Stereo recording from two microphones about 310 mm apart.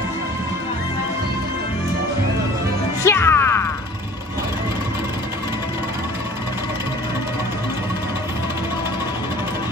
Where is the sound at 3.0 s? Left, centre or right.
Centre.